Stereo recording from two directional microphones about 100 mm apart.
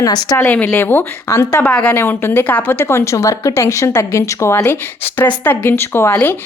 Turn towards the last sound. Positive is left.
turn(degrees=15)  # may be behind; listen again after turning